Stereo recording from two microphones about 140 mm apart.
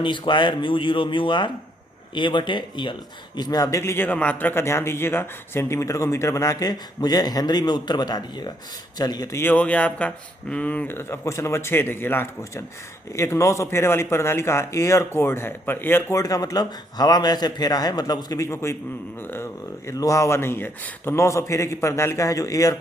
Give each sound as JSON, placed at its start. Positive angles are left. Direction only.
{"t": 0.0, "sound": "speech", "side_deg": 35}
{"t": 19.9, "sound": "speech", "side_deg": 20}